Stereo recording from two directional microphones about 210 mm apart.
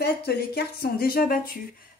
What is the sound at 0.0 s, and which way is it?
Speech, 50° left (ahead or behind).